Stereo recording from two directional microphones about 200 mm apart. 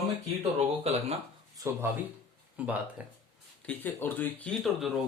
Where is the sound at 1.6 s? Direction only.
10° right (ahead or behind).